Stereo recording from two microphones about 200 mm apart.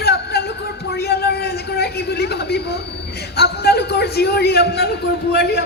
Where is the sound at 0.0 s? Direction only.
55° left (ahead or behind).